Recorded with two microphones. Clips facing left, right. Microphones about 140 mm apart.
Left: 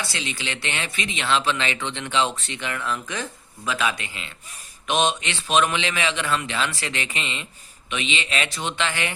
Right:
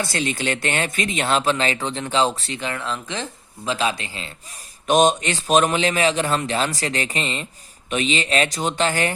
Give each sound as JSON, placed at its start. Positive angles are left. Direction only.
{"t": 0.0, "sound": "speech", "side_deg": -45}